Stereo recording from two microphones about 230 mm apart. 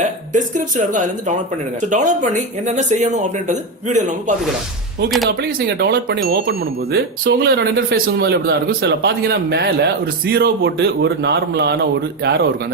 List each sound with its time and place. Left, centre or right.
0.3 s speech: right